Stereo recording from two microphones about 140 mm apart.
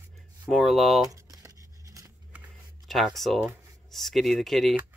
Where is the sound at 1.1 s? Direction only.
25° right (ahead or behind).